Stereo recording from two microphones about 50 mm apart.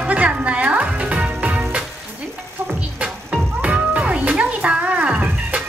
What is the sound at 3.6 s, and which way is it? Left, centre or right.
Music, right.